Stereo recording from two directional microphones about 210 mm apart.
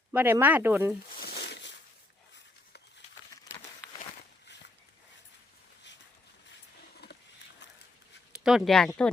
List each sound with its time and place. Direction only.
0.1 s speech: 10° right (ahead or behind)
1.1 s a sound: 45° left (ahead or behind)
8.4 s speech: centre (ahead or behind)